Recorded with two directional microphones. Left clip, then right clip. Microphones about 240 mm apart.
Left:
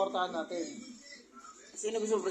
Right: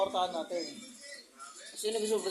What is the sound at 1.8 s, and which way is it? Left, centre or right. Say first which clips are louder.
Speech: even; right.